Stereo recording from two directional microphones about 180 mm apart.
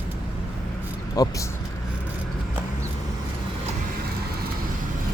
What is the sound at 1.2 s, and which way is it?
Speech, 20° left (ahead or behind).